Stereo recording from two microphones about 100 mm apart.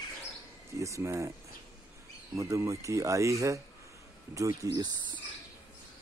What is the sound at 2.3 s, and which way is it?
Speech, 30° right (ahead or behind).